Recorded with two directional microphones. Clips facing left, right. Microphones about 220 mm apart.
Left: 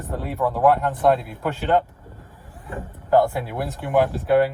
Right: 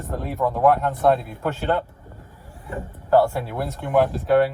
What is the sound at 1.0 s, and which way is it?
Speech, 15° left (ahead or behind).